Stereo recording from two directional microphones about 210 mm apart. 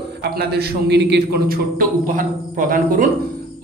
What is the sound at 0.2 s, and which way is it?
Speech, 50° right (ahead or behind).